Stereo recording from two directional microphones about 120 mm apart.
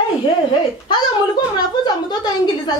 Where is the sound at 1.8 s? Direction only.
35° left (ahead or behind).